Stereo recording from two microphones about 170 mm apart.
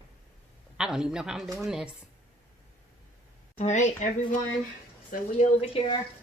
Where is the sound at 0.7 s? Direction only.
5° right (ahead or behind).